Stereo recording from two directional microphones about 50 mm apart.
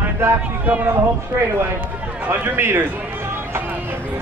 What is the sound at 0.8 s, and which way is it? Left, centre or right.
A man's voice, right.